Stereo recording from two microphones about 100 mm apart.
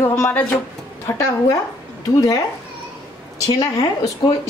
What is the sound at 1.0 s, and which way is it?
A woman's voice, 30° left (ahead or behind).